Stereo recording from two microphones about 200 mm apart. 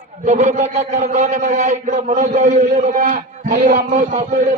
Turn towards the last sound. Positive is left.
turn(degrees=-40)  # may be behind; listen again after turning